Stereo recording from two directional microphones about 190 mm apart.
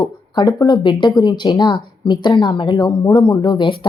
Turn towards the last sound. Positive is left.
turn(degrees=25)  # may be behind; listen again after turning